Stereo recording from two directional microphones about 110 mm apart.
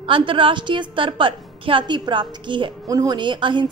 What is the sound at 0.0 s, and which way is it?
A woman's voice, 50° right (ahead or behind).